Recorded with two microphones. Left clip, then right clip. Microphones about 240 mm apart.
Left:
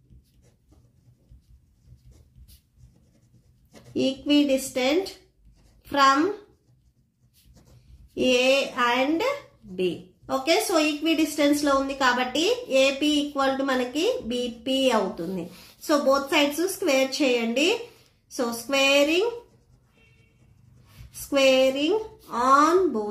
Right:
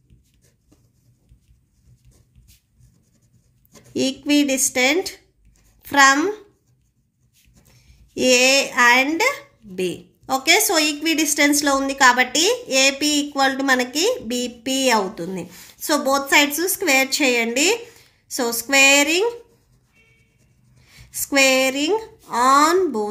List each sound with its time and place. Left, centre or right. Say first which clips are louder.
3.9 s a woman's voice: right 3 dB; right
8.1 s a woman's voice: right 5 dB; right
21.3 s a woman's voice: right 3 dB; right